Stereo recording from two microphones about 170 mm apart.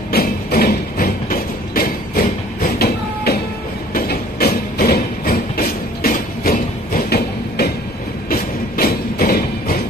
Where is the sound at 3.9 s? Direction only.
65° left (ahead or behind).